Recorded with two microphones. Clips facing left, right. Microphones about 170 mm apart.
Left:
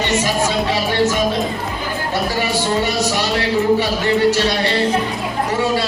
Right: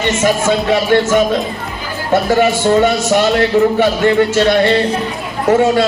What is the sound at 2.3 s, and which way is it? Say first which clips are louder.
A man's voice: right 10 dB; 50° right (ahead or behind).